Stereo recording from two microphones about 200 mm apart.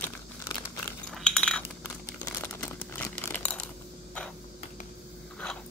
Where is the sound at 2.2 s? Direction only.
10° left (ahead or behind).